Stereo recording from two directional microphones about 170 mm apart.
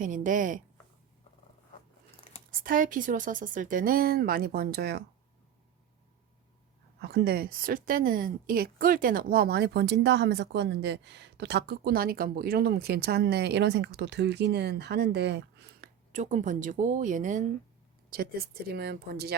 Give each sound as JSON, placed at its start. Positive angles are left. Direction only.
{"t": 0.0, "sound": "speech", "side_deg": -50}
{"t": 2.5, "sound": "speech", "side_deg": -55}
{"t": 7.0, "sound": "a woman's voice", "side_deg": -75}
{"t": 16.1, "sound": "speech", "side_deg": -45}
{"t": 18.1, "sound": "a woman's voice", "side_deg": -65}